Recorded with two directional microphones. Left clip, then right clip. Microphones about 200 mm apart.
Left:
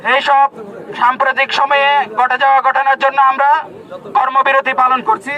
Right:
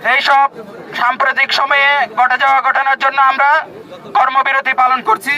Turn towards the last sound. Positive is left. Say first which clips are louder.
# even
turn(degrees=-5)  # may be behind; listen again after turning